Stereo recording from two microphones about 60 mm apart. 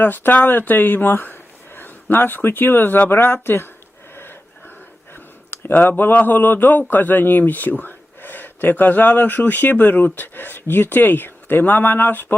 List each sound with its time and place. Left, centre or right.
0.0 s speech: left
4.1 s a sound: left
5.1 s speech: left